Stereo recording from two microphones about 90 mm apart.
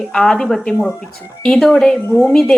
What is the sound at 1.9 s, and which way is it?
Speech, 25° left (ahead or behind).